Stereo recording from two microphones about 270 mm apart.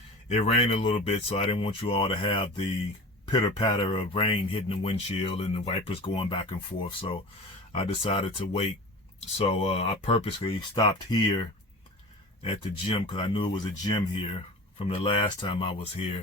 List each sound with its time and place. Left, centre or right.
0.3 s speech: left
7.7 s speech: centre